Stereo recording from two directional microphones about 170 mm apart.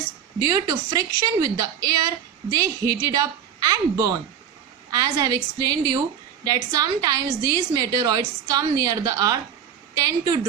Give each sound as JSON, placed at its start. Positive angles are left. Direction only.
{"t": 0.3, "sound": "a woman's voice", "side_deg": -20}